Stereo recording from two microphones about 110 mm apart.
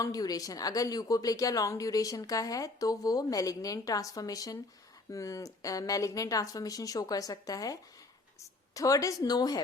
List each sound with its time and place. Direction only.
0.0 s a woman's voice: 35° left (ahead or behind)